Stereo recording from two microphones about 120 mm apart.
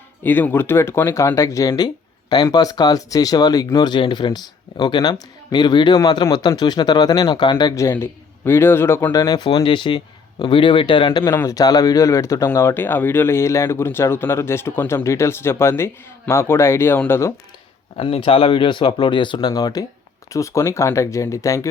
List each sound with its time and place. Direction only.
0.2 s speech: 15° left (ahead or behind); by 7.7 s 40° left (ahead or behind)
7.8 s speech: 20° left (ahead or behind)
9.1 s speech: 35° left (ahead or behind)
11.4 s speech: 30° left (ahead or behind)
17.9 s speech: 50° left (ahead or behind); by 21.7 s 25° left (ahead or behind)